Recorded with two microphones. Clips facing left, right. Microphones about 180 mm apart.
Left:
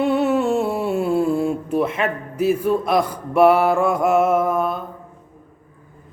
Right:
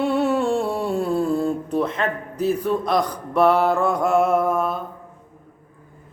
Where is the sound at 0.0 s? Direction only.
Centre (ahead or behind).